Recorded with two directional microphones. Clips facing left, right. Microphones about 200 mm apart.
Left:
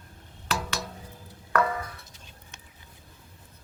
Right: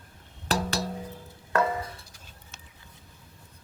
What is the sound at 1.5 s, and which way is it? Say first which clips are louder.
Music: even; 25° right (ahead or behind).